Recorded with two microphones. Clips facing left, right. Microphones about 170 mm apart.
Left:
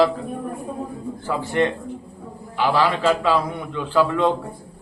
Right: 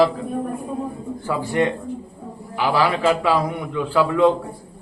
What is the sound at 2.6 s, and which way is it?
A man's voice, 10° right (ahead or behind).